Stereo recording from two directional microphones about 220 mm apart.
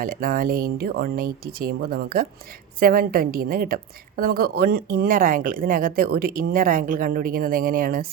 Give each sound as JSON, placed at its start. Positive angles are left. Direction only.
{"t": 0.0, "sound": "speech", "side_deg": -40}